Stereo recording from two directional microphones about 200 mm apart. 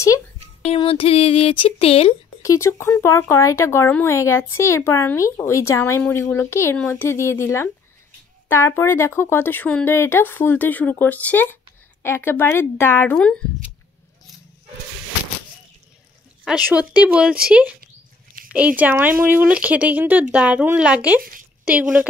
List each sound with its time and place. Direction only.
0.7 s speech: 30° left (ahead or behind)
2.4 s speech: 15° left (ahead or behind)
16.4 s speech: 5° right (ahead or behind)